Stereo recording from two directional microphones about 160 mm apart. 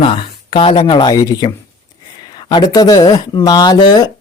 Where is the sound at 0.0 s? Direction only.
35° left (ahead or behind).